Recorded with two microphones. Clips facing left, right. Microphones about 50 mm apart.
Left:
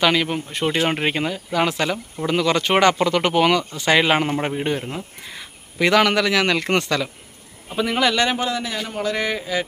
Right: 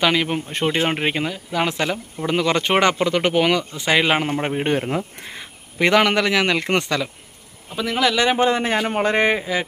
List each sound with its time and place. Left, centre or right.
0.0 s speech: centre
4.5 s speech: right
5.4 s speech: right
7.8 s speech: centre
8.4 s speech: right